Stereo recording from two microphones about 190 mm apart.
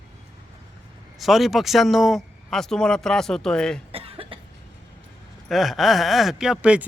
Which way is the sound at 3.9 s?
30° right (ahead or behind).